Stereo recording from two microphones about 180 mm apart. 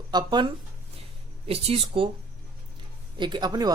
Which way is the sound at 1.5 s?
35° right (ahead or behind).